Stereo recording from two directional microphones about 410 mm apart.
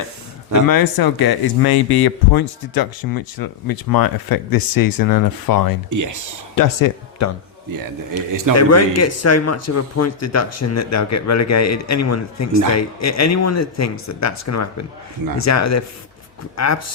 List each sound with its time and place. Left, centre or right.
0.7 s speech: left
5.9 s speech: right
6.6 s speech: left
8.1 s speech: right
8.5 s speech: left